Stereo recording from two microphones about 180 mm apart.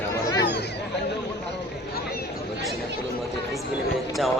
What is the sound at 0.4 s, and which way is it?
Chatter, 70° left (ahead or behind).